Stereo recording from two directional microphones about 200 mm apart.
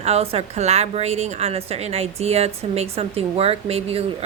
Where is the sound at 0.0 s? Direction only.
30° right (ahead or behind).